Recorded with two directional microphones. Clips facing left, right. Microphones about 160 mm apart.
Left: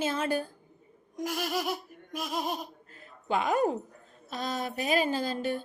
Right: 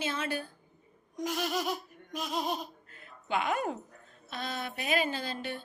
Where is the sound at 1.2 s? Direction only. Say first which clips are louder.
Left 1 dB; 10° left (ahead or behind).